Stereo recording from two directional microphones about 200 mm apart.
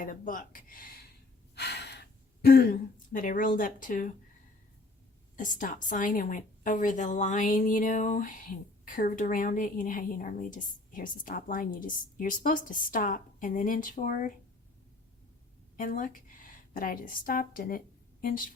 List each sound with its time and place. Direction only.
0.0 s speech: 45° left (ahead or behind)
1.5 s gasp: 55° left (ahead or behind)
5.4 s a woman's voice: 40° left (ahead or behind)
15.8 s a woman's voice: 45° left (ahead or behind)